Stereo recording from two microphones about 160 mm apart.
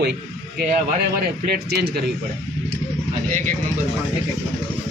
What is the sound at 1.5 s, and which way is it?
Speech, 85° right.